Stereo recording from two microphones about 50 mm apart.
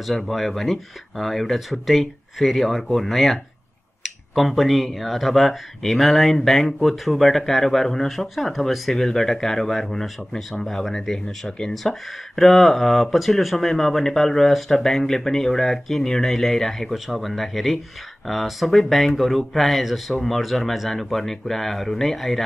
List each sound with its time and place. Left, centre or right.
0.3 s speech: centre